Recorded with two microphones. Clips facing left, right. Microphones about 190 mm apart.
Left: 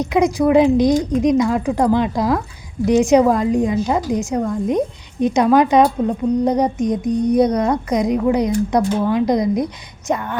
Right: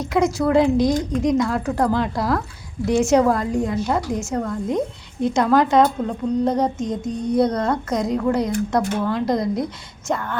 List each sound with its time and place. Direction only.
0.0 s a woman's voice: 15° left (ahead or behind)